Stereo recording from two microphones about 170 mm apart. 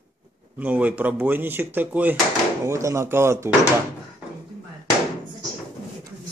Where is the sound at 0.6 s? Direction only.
10° right (ahead or behind).